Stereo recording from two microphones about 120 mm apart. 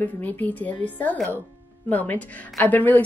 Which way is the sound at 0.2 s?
15° left (ahead or behind).